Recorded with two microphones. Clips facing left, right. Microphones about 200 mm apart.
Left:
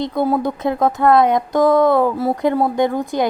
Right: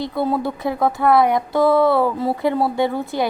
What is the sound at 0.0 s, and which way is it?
A woman's voice, 20° left (ahead or behind).